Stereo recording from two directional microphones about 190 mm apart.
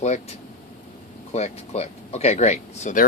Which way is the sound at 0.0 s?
35° left (ahead or behind).